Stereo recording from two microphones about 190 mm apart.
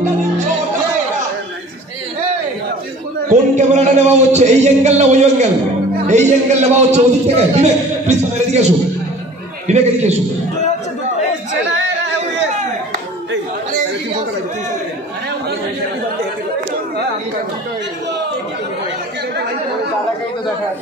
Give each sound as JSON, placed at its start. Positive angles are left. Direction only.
{"t": 3.3, "sound": "a man's voice", "side_deg": -40}